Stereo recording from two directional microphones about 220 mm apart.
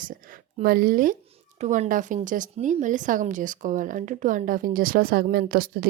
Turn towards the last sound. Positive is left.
turn(degrees=-40)  # may be behind; listen again after turning